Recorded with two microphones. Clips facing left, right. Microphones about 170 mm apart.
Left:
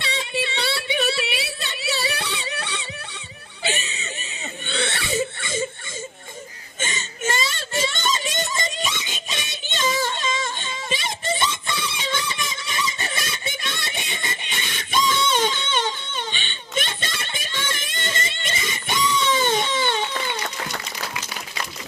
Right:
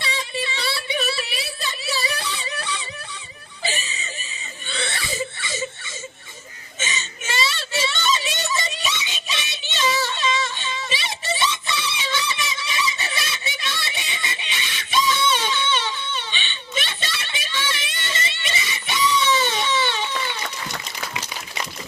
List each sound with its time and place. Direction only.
0.0 s child singing: 60° left (ahead or behind)
3.6 s laughter: 65° left (ahead or behind)
6.7 s whimper: 50° left (ahead or behind)